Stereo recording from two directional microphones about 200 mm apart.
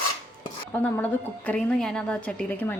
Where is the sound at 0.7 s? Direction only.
10° left (ahead or behind).